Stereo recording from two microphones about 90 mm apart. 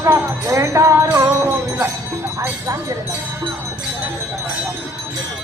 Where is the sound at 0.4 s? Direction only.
35° right (ahead or behind).